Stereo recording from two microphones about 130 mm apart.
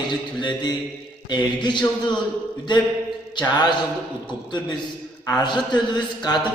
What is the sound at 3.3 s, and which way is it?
Speech, 35° left (ahead or behind).